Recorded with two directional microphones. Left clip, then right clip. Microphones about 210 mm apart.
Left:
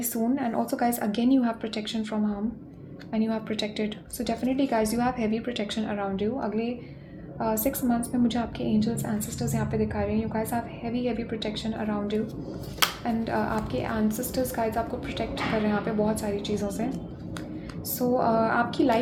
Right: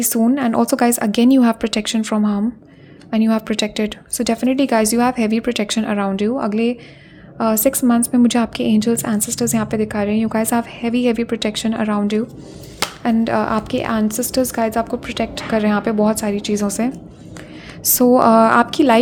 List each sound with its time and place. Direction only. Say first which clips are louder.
0.0 s a woman's voice: right 10 dB; 45° right (ahead or behind)